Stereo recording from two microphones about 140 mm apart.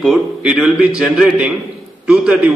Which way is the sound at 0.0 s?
5° right (ahead or behind).